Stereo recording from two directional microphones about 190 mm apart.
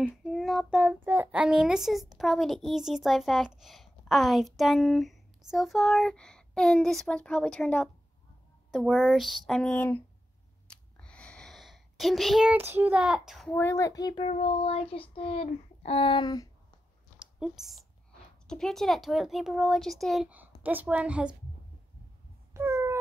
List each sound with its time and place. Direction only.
0.0 s child singing: centre (ahead or behind)
2.7 s a child's voice: centre (ahead or behind)
10.7 s a sound: 5° left (ahead or behind)
13.6 s speech: 15° left (ahead or behind)
14.2 s child singing: 30° left (ahead or behind)
17.2 s a sound: centre (ahead or behind)
18.5 s a child's voice: centre (ahead or behind)
22.5 s cat: 15° right (ahead or behind)